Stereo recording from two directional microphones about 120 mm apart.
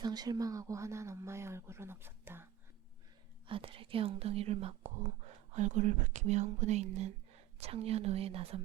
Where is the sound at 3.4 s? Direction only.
50° right (ahead or behind); by 7.1 s 70° right (ahead or behind).